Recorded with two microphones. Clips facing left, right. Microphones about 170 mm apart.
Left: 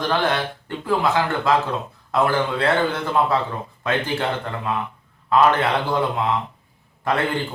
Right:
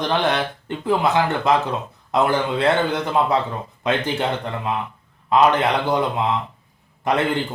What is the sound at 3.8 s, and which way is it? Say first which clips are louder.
Speech: right 2 dB; 20° right (ahead or behind).